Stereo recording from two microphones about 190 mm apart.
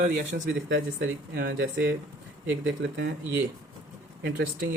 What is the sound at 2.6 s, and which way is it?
Speech, 80° right.